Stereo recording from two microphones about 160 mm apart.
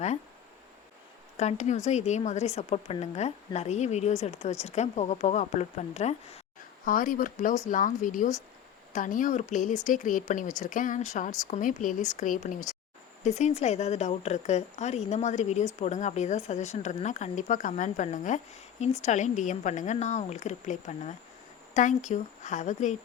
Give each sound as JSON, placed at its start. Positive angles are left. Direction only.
{"t": 1.4, "sound": "speech", "side_deg": 45}
{"t": 6.8, "sound": "speech", "side_deg": 60}